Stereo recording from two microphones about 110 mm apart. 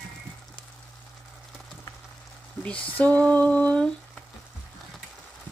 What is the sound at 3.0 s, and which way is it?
Speech, 10° left (ahead or behind).